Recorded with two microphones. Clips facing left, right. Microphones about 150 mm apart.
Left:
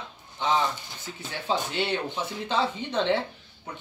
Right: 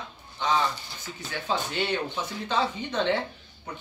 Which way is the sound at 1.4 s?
25° left (ahead or behind).